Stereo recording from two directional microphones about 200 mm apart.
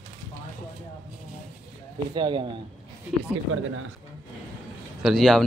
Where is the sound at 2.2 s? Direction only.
25° right (ahead or behind).